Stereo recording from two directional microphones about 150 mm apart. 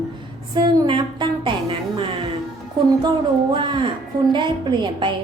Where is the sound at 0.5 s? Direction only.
30° right (ahead or behind).